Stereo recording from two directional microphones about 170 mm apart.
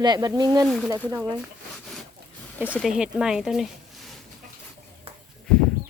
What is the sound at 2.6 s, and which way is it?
Speech, 5° left (ahead or behind).